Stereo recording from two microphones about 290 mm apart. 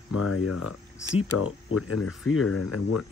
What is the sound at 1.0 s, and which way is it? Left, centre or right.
Speech, centre.